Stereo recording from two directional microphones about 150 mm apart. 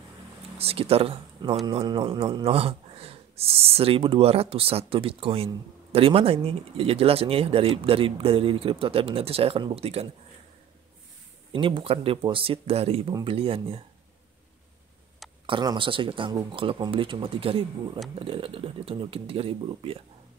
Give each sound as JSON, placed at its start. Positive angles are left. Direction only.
{"t": 0.6, "sound": "speech", "side_deg": -40}
{"t": 11.5, "sound": "speech", "side_deg": -35}
{"t": 15.4, "sound": "speech", "side_deg": -30}